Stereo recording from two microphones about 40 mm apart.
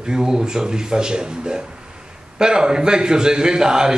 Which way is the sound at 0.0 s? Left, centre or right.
Centre.